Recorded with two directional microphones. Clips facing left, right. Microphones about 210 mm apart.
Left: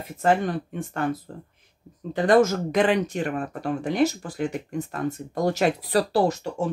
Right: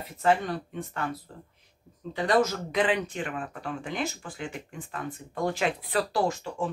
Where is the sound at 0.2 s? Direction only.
45° left (ahead or behind).